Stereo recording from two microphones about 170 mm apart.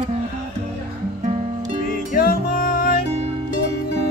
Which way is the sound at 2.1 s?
60° left (ahead or behind).